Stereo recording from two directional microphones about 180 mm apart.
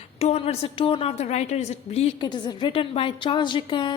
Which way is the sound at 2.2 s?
25° left (ahead or behind).